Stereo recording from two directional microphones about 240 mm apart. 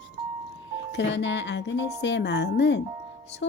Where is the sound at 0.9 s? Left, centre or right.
Left.